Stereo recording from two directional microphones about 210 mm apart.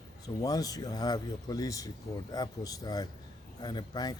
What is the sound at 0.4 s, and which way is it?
Speech, 20° left (ahead or behind).